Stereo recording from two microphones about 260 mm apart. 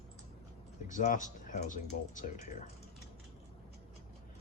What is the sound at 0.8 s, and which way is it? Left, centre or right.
Speech, left.